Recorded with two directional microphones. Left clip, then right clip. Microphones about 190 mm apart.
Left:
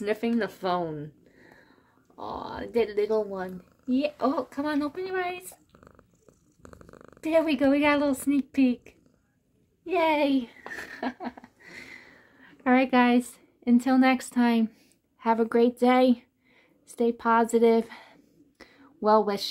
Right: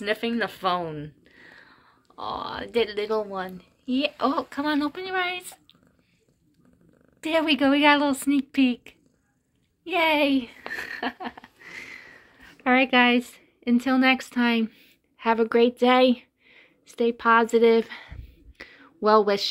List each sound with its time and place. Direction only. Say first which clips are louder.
0.0 s a woman's voice: right 2 dB; 10° left (ahead or behind)
6.6 s purr: left 12 dB; 40° left (ahead or behind)
7.2 s a woman's voice: right 1 dB; centre (ahead or behind)
10.7 s a sound: right 5 dB; centre (ahead or behind)